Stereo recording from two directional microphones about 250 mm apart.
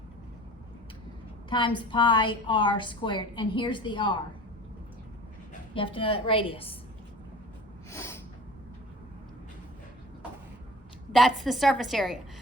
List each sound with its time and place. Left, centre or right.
1.5 s a woman's voice: centre
5.7 s a woman's voice: left
7.9 s snort: centre
11.1 s a woman's voice: centre